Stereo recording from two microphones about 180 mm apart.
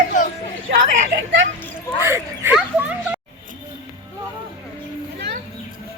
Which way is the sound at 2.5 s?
5° right (ahead or behind).